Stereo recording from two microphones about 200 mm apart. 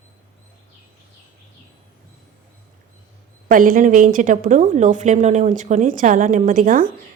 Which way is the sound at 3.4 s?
45° right (ahead or behind).